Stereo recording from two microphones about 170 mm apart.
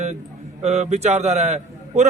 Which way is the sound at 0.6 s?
40° right (ahead or behind).